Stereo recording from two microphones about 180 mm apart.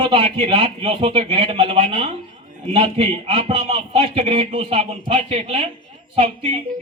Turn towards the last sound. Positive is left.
turn(degrees=-35)  # may be behind; listen again after turning